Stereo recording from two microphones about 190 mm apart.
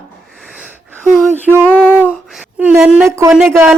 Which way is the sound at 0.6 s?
5° right (ahead or behind).